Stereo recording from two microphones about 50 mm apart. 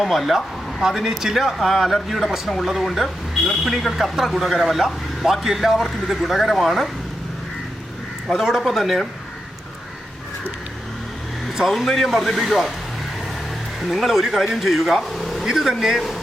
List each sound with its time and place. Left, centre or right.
0.0 s speech: centre
0.8 s speech: centre
8.3 s speech: centre
11.5 s speech: centre
13.9 s speech: centre
15.4 s speech: centre